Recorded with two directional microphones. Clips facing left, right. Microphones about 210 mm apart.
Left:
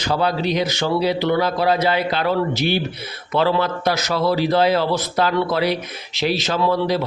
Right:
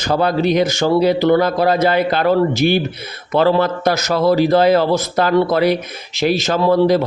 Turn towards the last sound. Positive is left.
turn(degrees=-50)  # may be behind; listen again after turning